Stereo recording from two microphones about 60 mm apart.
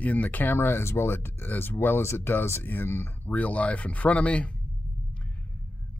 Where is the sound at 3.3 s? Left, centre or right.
Left.